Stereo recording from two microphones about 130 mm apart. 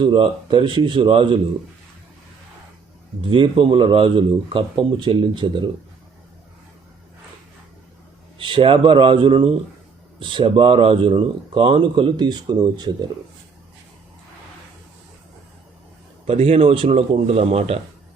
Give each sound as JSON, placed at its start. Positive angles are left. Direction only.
{"t": 0.0, "sound": "speech", "side_deg": -40}
{"t": 3.2, "sound": "speech", "side_deg": -40}
{"t": 8.4, "sound": "a man's voice", "side_deg": -40}
{"t": 16.2, "sound": "a man's voice", "side_deg": -50}